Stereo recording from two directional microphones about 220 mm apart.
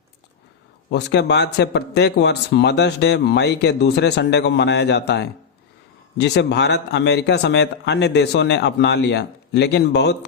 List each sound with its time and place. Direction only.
0.9 s speech: 50° left (ahead or behind)